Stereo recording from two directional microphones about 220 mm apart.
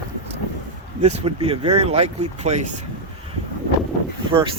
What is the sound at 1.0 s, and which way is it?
Speech, 30° right (ahead or behind).